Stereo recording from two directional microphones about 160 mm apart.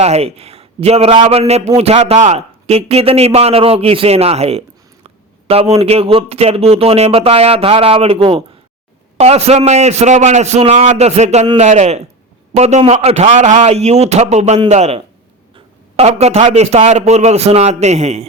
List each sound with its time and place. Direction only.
0.0 s a man's voice: 40° right (ahead or behind)